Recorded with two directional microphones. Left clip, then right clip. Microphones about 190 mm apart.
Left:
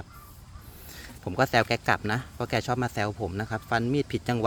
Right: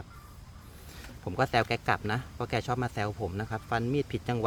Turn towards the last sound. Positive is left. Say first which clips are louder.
# left 3 dB
turn(degrees=40)  # may be behind; listen again after turning